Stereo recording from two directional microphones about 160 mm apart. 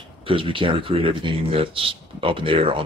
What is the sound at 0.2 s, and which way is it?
Speech, 35° right (ahead or behind).